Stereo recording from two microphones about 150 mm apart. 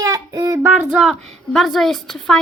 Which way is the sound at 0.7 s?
5° right (ahead or behind).